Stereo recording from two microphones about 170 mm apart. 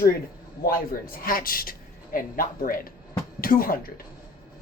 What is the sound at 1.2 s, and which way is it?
Speech, 55° left (ahead or behind).